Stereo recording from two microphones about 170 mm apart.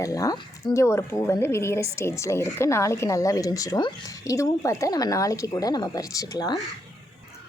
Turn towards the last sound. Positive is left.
turn(degrees=25)  # may be behind; listen again after turning